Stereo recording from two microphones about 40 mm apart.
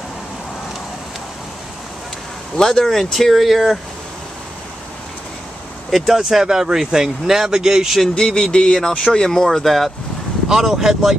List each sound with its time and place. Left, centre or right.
2.6 s speech: centre
5.9 s speech: centre
8.1 s speech: centre